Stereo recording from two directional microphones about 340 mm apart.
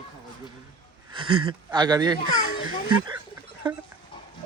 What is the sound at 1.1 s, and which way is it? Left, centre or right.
Speech, centre.